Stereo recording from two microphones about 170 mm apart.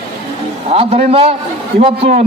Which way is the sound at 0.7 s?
35° right (ahead or behind).